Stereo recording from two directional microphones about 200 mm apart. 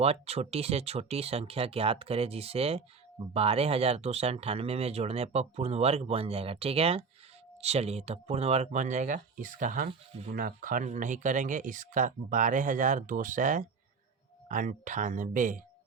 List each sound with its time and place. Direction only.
0.0 s speech: 30° right (ahead or behind)